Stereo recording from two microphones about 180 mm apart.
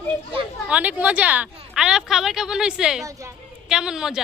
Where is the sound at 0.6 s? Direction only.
5° right (ahead or behind).